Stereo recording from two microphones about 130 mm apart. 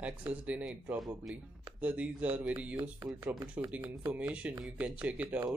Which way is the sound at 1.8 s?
10° right (ahead or behind).